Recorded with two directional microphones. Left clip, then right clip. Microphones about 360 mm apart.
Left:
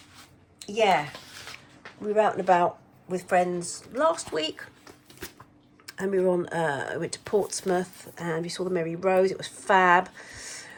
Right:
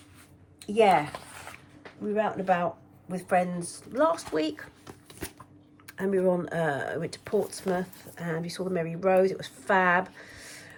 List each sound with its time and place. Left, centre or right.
0.6 s speech: centre
2.1 s speech: centre
5.8 s speech: centre